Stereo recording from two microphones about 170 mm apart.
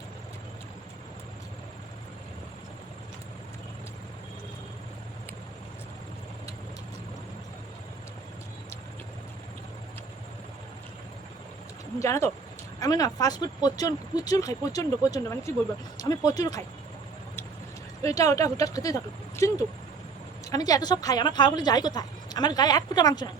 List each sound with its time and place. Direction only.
11.9 s speech: 15° left (ahead or behind)
18.0 s speech: 20° left (ahead or behind)